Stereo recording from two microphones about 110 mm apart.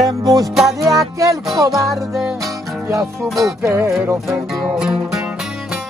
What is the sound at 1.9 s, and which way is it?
Music, 5° right (ahead or behind).